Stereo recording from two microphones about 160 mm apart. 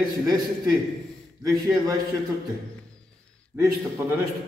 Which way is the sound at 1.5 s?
20° right (ahead or behind).